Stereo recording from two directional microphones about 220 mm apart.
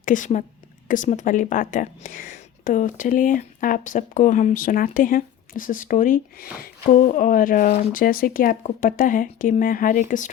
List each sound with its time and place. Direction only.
0.0 s a woman's voice: 35° left (ahead or behind)